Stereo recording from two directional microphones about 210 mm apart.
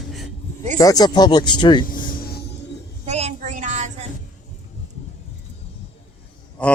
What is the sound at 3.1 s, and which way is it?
Child singing, 30° right (ahead or behind).